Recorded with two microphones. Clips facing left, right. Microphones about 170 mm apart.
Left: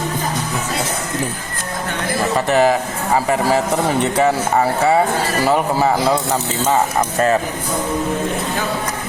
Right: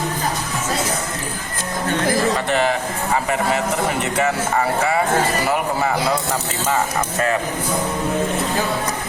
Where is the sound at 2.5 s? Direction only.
40° left (ahead or behind).